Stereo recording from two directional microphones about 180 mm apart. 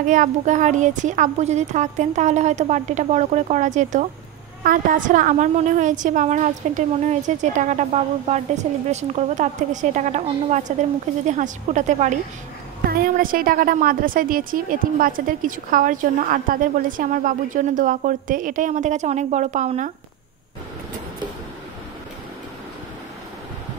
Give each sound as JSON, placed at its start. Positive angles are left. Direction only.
{"t": 0.0, "sound": "a woman's voice", "side_deg": -45}